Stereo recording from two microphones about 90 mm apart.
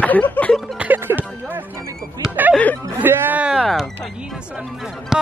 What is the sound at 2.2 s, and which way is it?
Speech, 5° right (ahead or behind).